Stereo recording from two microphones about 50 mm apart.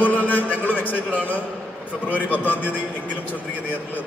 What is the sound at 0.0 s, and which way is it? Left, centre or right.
Music, left.